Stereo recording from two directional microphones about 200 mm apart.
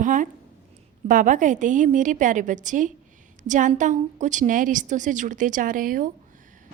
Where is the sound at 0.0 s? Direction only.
40° right (ahead or behind).